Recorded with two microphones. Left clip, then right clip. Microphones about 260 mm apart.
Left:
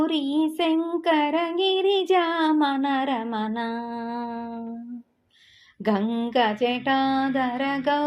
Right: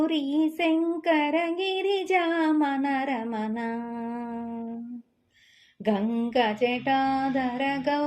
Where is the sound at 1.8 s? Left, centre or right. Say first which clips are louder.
Left 4 dB; left.